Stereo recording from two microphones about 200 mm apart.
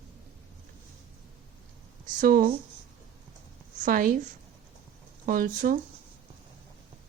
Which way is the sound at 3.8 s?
45° right (ahead or behind).